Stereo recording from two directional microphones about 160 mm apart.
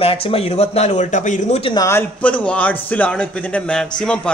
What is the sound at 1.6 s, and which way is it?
Speech, 30° left (ahead or behind).